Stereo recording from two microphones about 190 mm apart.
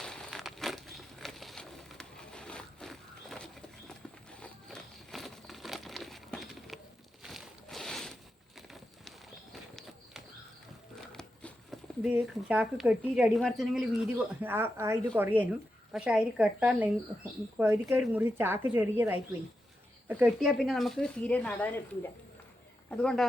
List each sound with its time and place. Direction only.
0.0 s crumpling: 5° left (ahead or behind)
7.2 s a sound: centre (ahead or behind)
11.1 s a woman's voice: 5° left (ahead or behind)